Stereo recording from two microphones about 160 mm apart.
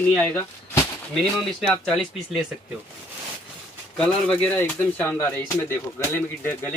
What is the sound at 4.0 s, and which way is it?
Speech, 5° left (ahead or behind).